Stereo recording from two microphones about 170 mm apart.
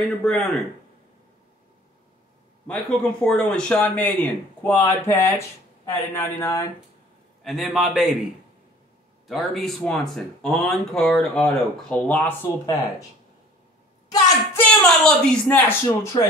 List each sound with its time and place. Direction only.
0.2 s speech: 5° left (ahead or behind)
2.6 s speech: 5° left (ahead or behind)
7.4 s speech: centre (ahead or behind)
9.3 s speech: centre (ahead or behind)
14.0 s a woman's voice: 20° left (ahead or behind)
14.6 s speech: 10° left (ahead or behind)